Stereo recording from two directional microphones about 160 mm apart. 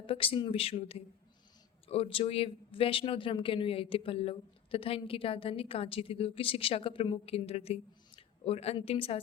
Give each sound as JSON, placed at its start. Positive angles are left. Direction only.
{"t": 0.0, "sound": "speech", "side_deg": 35}